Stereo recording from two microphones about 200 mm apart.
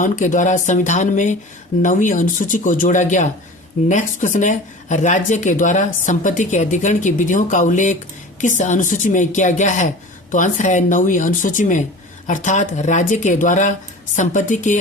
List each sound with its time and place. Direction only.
0.0 s speech: 40° left (ahead or behind)